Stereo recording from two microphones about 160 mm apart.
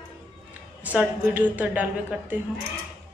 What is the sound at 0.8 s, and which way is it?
A man's voice, 10° right (ahead or behind).